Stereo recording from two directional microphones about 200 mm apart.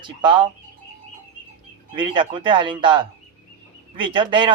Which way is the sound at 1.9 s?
25° right (ahead or behind).